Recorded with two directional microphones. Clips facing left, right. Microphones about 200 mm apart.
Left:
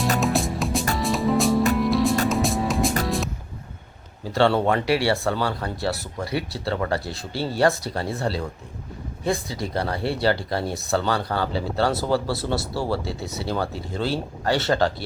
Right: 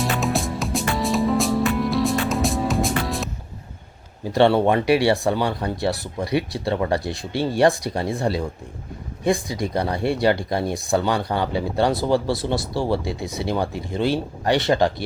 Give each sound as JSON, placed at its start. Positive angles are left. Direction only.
{"t": 0.2, "sound": "music", "side_deg": 0}
{"t": 4.2, "sound": "speech", "side_deg": -15}